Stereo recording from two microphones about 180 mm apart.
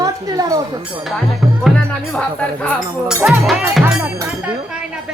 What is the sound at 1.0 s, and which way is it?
Speech, centre (ahead or behind).